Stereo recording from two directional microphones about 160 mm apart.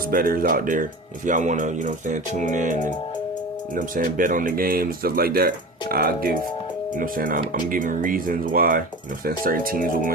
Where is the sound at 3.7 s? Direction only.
60° right (ahead or behind).